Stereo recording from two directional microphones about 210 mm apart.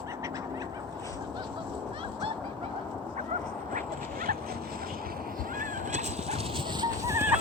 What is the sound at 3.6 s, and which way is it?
Dog, 40° right (ahead or behind).